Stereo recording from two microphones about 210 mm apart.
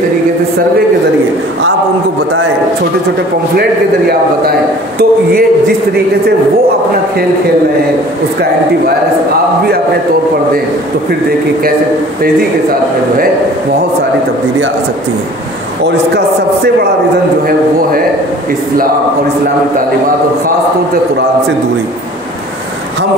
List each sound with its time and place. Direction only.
4.1 s speech: 45° right (ahead or behind)
15.8 s speech: 50° right (ahead or behind)